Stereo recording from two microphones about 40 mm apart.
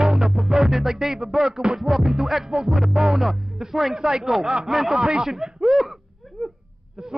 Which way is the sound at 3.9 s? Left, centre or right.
Centre.